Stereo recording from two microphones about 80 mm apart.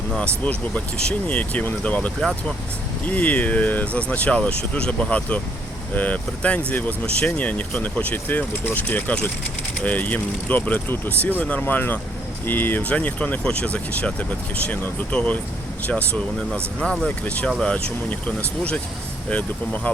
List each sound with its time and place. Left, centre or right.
0.2 s speech: centre